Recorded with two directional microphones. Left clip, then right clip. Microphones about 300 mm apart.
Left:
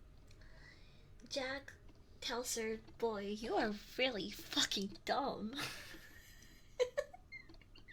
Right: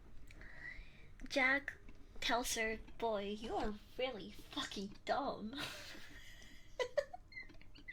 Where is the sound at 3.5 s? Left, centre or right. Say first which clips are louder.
Left 6 dB; left; by 5.7 s centre.